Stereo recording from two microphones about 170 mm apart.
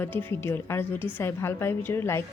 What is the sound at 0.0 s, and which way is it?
A woman's voice, 10° left (ahead or behind).